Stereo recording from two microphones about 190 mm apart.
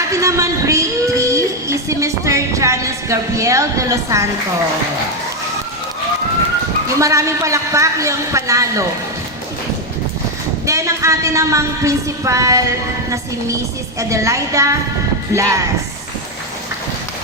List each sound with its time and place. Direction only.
0.1 s child singing: 15° right (ahead or behind)
7.0 s a woman's voice: 15° right (ahead or behind)
10.7 s a woman's voice: 15° right (ahead or behind)
14.0 s a woman's voice: 15° right (ahead or behind)